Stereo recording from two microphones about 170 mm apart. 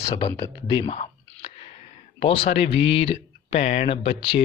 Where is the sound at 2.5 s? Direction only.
35° left (ahead or behind).